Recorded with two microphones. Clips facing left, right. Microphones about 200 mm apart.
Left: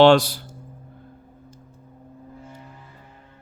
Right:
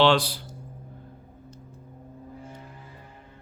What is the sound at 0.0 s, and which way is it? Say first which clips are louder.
Speech: left 7 dB; 45° left (ahead or behind).